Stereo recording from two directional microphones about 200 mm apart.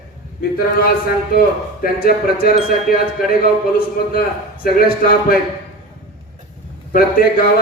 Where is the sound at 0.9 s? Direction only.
50° left (ahead or behind).